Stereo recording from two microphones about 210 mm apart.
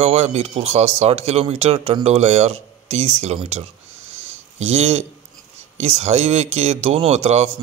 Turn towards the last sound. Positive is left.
turn(degrees=-30)  # may be behind; listen again after turning